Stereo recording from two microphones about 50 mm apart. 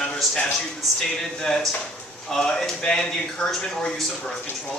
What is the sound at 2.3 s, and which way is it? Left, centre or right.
Speech, centre.